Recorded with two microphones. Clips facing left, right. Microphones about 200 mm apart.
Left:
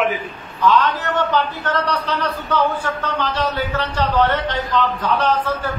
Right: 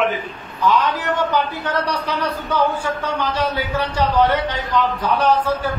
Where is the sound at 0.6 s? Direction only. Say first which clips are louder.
Left 1 dB; 10° right (ahead or behind).